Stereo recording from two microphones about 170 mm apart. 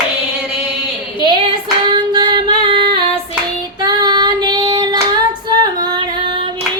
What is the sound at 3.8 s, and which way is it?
Child singing, 25° right (ahead or behind).